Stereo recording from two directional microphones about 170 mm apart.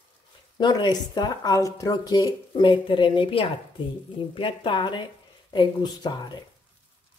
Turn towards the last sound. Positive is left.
turn(degrees=25)  # may be behind; listen again after turning